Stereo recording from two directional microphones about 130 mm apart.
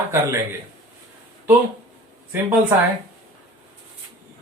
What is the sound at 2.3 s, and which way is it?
Speech, 15° right (ahead or behind).